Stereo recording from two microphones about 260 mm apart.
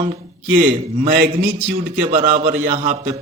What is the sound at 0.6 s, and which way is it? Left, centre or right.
A man's voice, right.